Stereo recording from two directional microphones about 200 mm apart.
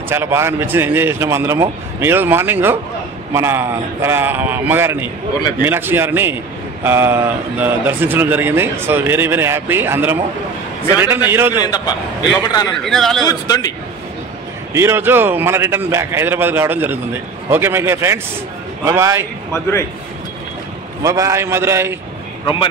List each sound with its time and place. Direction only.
0.1 s speech: 10° right (ahead or behind)
11.2 s speech: 10° right (ahead or behind)
11.6 s a man's voice: 20° left (ahead or behind)
12.8 s a man's voice: centre (ahead or behind)
13.3 s a man's voice: 20° left (ahead or behind)
14.7 s speech: 15° right (ahead or behind)
19.5 s a man's voice: 15° left (ahead or behind)
21.0 s speech: 15° right (ahead or behind)